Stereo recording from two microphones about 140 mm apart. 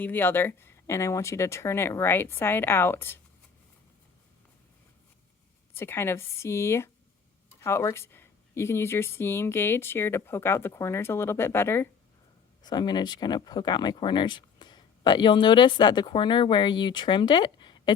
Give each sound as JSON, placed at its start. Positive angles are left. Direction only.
{"t": 0.0, "sound": "speech", "side_deg": 15}
{"t": 5.7, "sound": "speech", "side_deg": 15}
{"t": 12.6, "sound": "speech", "side_deg": 30}